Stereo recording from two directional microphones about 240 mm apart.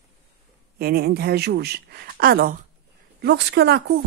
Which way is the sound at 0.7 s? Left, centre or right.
Right.